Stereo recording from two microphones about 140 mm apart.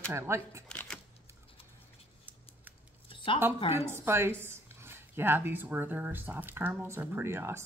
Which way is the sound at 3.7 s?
15° right (ahead or behind).